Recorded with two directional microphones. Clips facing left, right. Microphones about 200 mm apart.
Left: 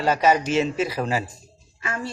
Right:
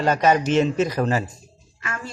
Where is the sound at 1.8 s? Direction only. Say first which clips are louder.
Left 3 dB; 35° left (ahead or behind).